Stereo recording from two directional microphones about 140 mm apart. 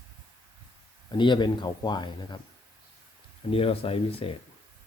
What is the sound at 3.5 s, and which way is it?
Speech, 40° left (ahead or behind).